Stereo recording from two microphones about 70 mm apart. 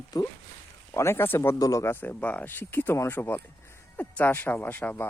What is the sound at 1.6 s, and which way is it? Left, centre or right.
Speech, left.